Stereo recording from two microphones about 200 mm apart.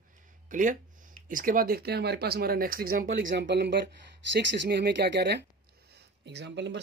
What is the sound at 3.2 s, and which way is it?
Speech, 60° right (ahead or behind).